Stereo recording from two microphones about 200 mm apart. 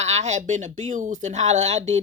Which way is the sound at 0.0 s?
35° right (ahead or behind).